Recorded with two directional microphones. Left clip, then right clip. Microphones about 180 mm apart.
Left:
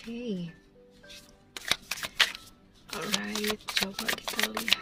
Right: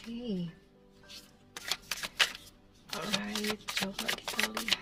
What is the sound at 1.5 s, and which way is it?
Shuffling cards, 30° left (ahead or behind).